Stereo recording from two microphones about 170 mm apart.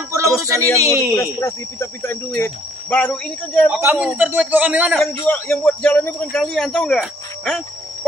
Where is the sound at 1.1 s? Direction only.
15° left (ahead or behind).